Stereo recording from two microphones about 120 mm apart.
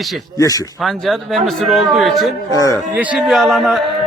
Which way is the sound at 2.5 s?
30° left (ahead or behind).